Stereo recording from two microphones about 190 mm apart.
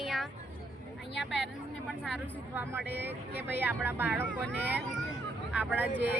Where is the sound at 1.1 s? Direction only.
65° left (ahead or behind).